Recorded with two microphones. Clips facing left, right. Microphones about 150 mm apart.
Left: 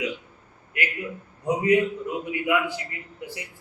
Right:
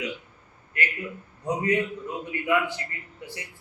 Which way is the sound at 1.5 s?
10° left (ahead or behind).